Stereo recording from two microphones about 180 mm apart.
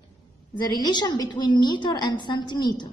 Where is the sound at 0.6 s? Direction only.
25° left (ahead or behind).